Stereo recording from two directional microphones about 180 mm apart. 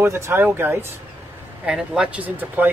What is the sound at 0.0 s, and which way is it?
Speech, 10° right (ahead or behind).